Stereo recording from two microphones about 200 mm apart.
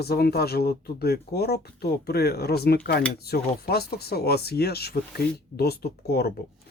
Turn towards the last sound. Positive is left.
turn(degrees=50)  # may be behind; listen again after turning